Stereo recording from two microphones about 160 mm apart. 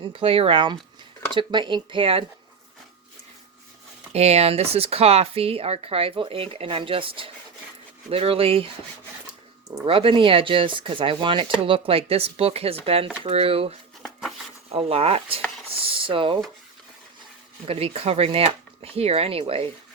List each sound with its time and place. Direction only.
0.0 s speech: 35° right (ahead or behind)
4.1 s speech: 40° right (ahead or behind)
9.8 s speech: 35° right (ahead or behind)
14.0 s a sound: centre (ahead or behind)
14.7 s speech: 35° right (ahead or behind)
15.8 s a sound: 35° right (ahead or behind)
17.7 s speech: 40° right (ahead or behind)